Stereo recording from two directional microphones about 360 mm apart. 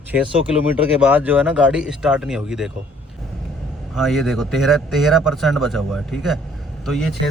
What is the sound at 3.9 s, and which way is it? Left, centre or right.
Speech, centre.